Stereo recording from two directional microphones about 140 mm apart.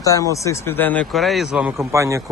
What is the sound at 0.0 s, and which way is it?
Speech, 25° left (ahead or behind).